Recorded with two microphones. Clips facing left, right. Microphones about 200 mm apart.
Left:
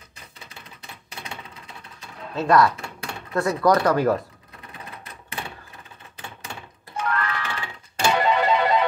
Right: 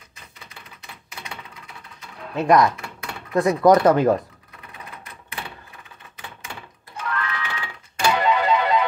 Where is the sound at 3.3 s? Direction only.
15° right (ahead or behind).